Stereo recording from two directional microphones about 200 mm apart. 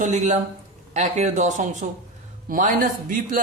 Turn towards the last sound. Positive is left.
turn(degrees=-45)  # may be behind; listen again after turning